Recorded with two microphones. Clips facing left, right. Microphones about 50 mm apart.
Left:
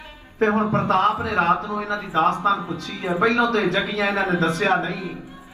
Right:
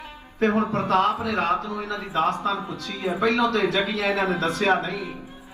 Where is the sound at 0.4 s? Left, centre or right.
Left.